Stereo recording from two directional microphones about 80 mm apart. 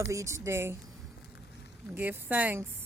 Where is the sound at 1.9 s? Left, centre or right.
Right.